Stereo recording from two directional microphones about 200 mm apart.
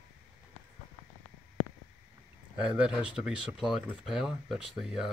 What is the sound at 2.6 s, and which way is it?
Speech, 5° right (ahead or behind).